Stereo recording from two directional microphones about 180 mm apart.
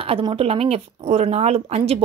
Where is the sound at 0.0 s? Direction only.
30° right (ahead or behind).